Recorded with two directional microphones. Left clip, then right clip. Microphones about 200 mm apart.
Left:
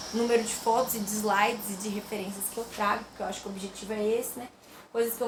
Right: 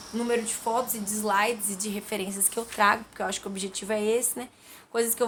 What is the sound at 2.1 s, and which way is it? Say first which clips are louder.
Speech: right 4 dB; 35° right (ahead or behind).